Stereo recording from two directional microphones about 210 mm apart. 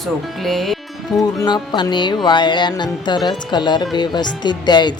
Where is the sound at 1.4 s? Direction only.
20° left (ahead or behind).